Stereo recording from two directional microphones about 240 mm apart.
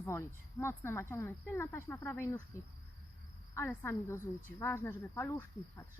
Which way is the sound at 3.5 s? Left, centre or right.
Centre.